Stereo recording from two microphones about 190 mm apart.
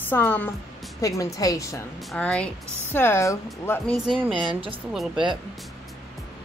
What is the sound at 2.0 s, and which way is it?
Speech, 5° left (ahead or behind).